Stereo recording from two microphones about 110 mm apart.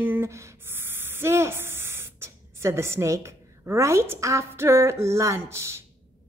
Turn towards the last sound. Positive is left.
turn(degrees=-25)  # may be behind; listen again after turning